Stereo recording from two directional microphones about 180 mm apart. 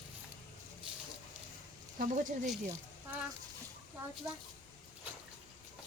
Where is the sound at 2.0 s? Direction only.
45° right (ahead or behind).